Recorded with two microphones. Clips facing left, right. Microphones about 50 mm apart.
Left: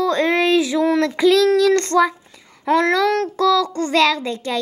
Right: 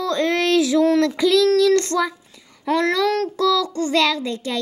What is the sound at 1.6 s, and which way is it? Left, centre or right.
Speech, left.